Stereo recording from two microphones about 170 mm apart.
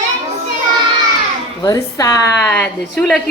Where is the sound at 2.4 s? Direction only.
10° left (ahead or behind).